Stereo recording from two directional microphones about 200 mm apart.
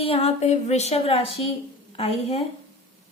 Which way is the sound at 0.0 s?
30° left (ahead or behind).